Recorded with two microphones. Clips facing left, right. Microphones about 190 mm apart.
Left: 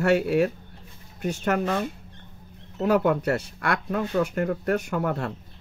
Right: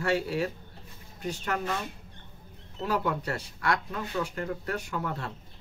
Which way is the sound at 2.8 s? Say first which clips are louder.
Left 8 dB; 55° left (ahead or behind).